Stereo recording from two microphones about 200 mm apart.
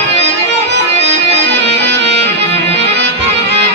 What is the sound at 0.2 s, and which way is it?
Music, 60° right (ahead or behind).